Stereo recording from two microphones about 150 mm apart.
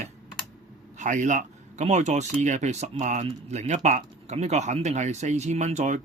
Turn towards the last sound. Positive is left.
turn(degrees=-50)  # may be behind; listen again after turning